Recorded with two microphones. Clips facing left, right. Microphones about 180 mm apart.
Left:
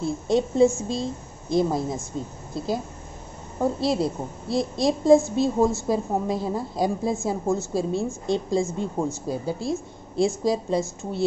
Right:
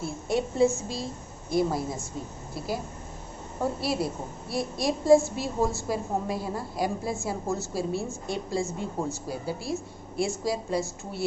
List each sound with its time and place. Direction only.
0.0 s a woman's voice: 20° left (ahead or behind)
3.8 s a woman's voice: 20° left (ahead or behind)